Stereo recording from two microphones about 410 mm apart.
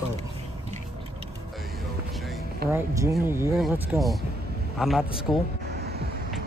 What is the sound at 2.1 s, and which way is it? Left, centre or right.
Music, centre.